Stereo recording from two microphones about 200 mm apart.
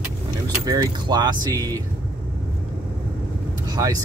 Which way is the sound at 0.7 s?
20° right (ahead or behind).